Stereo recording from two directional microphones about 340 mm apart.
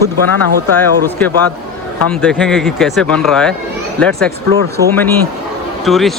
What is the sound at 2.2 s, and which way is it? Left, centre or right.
Speech, centre.